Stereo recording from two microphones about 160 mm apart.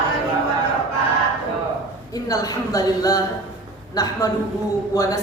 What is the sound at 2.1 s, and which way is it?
A woman's voice, 20° left (ahead or behind).